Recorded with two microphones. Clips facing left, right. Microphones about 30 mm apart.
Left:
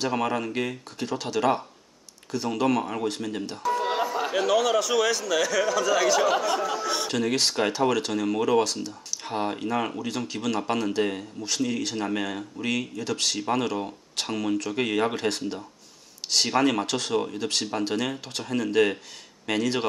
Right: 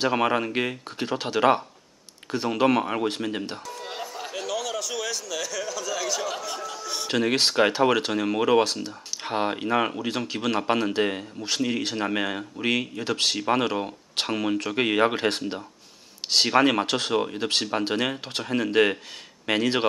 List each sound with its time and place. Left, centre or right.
0.0 s speech: right
3.6 s speech: centre
7.1 s speech: right